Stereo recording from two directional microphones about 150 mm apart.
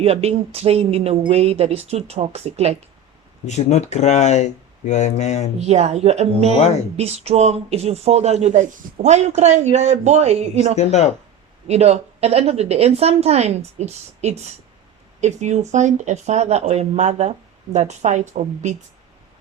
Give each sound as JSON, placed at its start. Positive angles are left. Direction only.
{"t": 0.0, "sound": "speech", "side_deg": -45}
{"t": 3.4, "sound": "speech", "side_deg": 50}
{"t": 5.5, "sound": "speech", "side_deg": -45}
{"t": 10.8, "sound": "speech", "side_deg": 50}
{"t": 11.7, "sound": "speech", "side_deg": -45}